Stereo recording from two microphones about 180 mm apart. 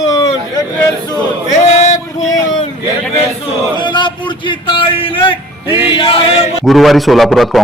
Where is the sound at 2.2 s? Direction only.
20° left (ahead or behind).